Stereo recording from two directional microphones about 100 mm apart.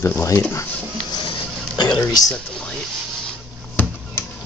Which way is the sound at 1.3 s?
50° left (ahead or behind).